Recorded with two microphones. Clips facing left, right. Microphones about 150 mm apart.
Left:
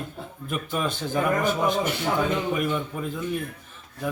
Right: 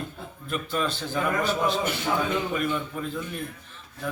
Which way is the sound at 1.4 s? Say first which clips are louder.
Left 2 dB; 50° left (ahead or behind).